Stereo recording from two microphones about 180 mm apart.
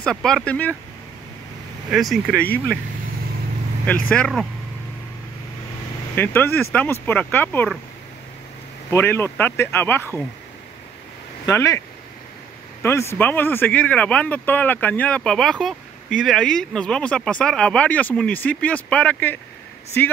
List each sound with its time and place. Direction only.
0.0 s speech: 5° left (ahead or behind)
1.9 s speech: 5° right (ahead or behind)
2.4 s speech: 10° left (ahead or behind)
4.1 s speech: 5° left (ahead or behind)
6.1 s speech: 10° left (ahead or behind)
8.9 s speech: 15° left (ahead or behind)
11.4 s speech: 15° left (ahead or behind)
12.8 s speech: 15° left (ahead or behind)